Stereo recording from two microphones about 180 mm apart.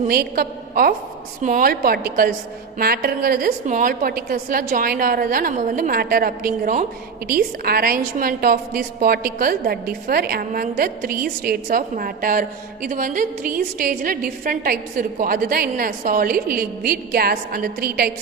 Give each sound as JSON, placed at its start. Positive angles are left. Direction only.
{"t": 0.1, "sound": "a woman's voice", "side_deg": -55}